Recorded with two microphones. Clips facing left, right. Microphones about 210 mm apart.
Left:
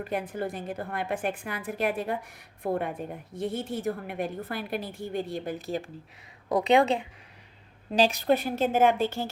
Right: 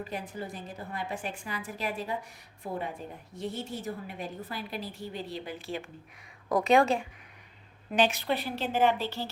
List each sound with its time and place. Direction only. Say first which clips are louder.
0.0 s a woman's voice: left 6 dB; 55° left (ahead or behind); by 5.9 s 40° left (ahead or behind)
6.5 s a woman's voice: left 1 dB; 20° left (ahead or behind)
7.9 s a woman's voice: left 4 dB; 35° left (ahead or behind); by 9.3 s 50° left (ahead or behind)